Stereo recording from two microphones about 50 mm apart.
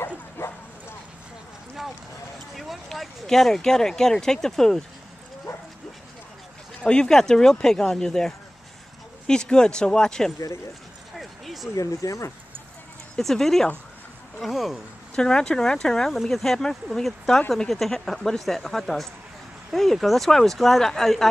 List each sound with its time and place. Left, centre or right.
0.4 s bow-wow: left
2.5 s speech: centre
6.8 s speech: centre
11.1 s a sound: centre
12.0 s speech: left
13.1 s speech: centre
15.1 s speech: centre